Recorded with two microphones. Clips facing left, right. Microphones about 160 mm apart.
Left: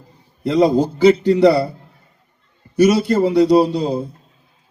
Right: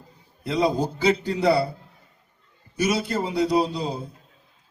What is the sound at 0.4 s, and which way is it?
A man's voice, 70° left (ahead or behind).